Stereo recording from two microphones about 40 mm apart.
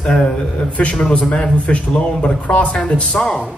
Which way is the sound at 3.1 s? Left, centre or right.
Centre.